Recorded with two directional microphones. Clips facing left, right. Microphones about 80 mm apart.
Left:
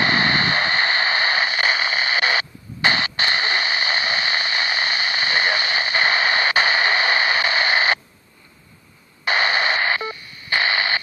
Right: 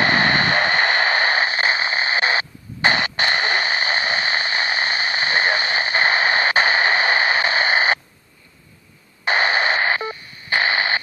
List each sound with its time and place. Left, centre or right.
0.0 s vehicle: right
9.2 s radio: right